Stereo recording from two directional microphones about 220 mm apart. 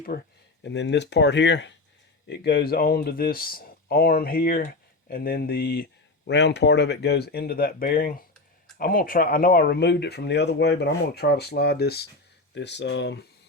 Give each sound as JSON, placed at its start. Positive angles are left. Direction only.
{"t": 0.1, "sound": "speech", "side_deg": 40}
{"t": 0.6, "sound": "speech", "side_deg": 50}